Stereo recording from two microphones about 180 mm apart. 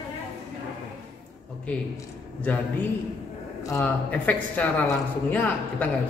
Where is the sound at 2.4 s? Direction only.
10° left (ahead or behind).